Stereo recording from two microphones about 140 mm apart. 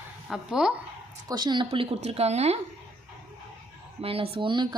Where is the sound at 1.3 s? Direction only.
30° right (ahead or behind); by 2.6 s 50° right (ahead or behind).